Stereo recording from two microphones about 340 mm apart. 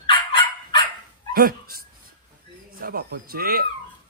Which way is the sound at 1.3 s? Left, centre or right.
Right.